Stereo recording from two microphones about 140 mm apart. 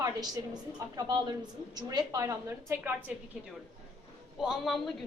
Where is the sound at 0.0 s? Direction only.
30° right (ahead or behind).